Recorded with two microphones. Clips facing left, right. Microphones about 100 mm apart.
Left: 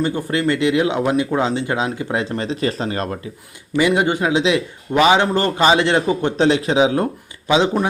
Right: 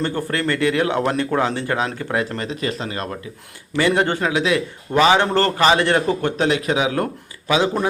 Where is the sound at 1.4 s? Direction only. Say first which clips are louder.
Left 1 dB; 20° left (ahead or behind).